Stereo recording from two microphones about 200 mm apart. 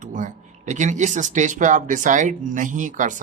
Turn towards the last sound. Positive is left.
turn(degrees=-40)  # may be behind; listen again after turning